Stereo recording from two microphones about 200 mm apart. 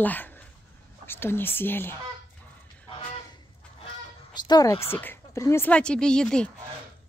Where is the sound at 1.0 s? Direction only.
10° left (ahead or behind).